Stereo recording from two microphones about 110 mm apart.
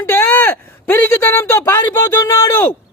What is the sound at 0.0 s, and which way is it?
Speech, 20° left (ahead or behind).